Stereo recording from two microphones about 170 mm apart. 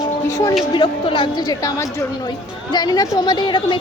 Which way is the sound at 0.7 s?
30° left (ahead or behind).